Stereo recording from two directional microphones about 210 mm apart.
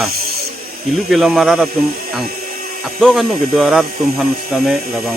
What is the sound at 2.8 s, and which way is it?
Speech, centre (ahead or behind).